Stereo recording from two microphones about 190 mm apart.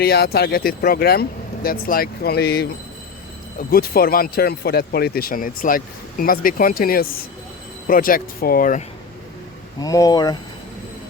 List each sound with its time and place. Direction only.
0.0 s speech: 55° left (ahead or behind)
9.8 s speech: 20° left (ahead or behind)